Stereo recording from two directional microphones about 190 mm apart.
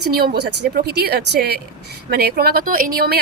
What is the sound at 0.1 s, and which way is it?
Speech, 55° right (ahead or behind).